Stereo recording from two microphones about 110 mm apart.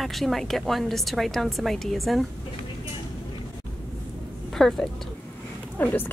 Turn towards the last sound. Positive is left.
turn(degrees=15)  # may be behind; listen again after turning